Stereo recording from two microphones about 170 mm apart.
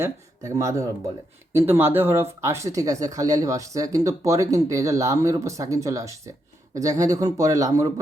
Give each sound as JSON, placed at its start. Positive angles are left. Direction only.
{"t": 0.0, "sound": "speech", "side_deg": -20}